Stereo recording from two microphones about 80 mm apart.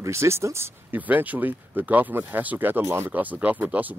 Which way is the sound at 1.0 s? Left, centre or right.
Right.